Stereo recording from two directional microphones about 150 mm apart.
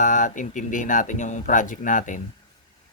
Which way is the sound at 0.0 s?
55° left (ahead or behind).